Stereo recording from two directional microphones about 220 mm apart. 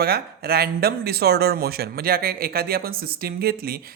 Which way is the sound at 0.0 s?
45° right (ahead or behind).